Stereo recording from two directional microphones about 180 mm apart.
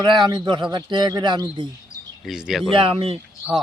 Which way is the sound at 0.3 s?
25° right (ahead or behind).